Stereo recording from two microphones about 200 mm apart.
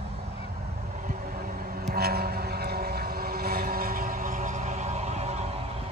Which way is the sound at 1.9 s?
50° right (ahead or behind).